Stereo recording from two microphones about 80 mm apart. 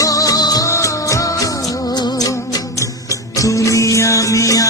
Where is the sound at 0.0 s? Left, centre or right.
Left.